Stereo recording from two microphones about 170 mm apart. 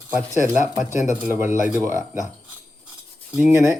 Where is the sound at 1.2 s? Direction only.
10° right (ahead or behind).